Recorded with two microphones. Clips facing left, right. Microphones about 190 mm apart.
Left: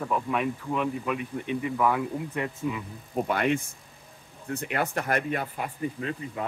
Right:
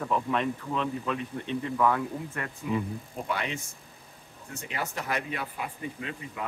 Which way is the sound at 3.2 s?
55° left (ahead or behind).